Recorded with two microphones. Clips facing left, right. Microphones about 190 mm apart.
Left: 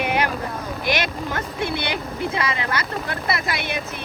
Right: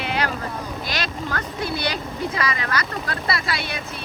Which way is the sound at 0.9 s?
20° left (ahead or behind).